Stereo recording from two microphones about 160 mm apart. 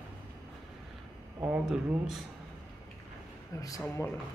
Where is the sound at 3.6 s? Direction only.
20° left (ahead or behind).